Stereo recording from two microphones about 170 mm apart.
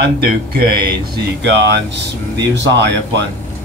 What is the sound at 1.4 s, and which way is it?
A man's voice, 90° right.